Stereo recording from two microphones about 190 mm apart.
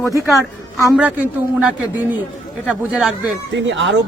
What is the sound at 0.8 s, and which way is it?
A man's voice, 10° right (ahead or behind).